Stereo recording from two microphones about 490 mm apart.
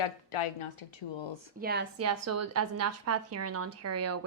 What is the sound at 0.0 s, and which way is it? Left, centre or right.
Speech, left.